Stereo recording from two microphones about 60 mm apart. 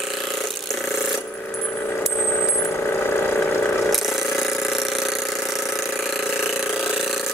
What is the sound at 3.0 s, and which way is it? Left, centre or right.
Engine, left.